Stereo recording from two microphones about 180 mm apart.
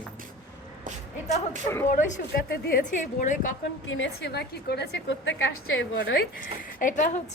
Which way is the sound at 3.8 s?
90° left.